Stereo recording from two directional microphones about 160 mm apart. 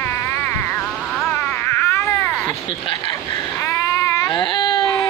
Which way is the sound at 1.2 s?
15° left (ahead or behind).